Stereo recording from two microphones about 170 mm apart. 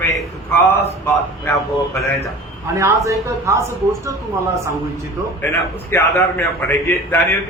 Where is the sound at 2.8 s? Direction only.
15° right (ahead or behind).